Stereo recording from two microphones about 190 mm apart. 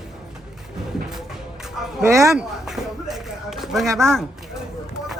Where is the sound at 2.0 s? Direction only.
15° right (ahead or behind).